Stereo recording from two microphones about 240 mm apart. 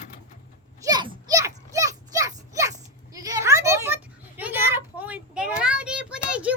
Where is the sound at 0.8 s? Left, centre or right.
Centre.